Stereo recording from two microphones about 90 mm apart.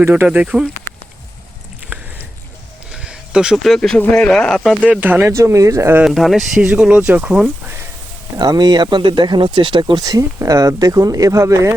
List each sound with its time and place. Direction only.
0.3 s speech: 10° right (ahead or behind)
1.9 s a sound: 20° right (ahead or behind)
2.9 s a sound: 10° right (ahead or behind)
3.8 s speech: 10° left (ahead or behind)
4.9 s speech: 20° right (ahead or behind)
5.3 s speech: 35° right (ahead or behind)
6.1 s speech: centre (ahead or behind)
6.6 s speech: 10° right (ahead or behind)
8.4 s speech: 50° right (ahead or behind)
10.0 s speech: 40° right (ahead or behind)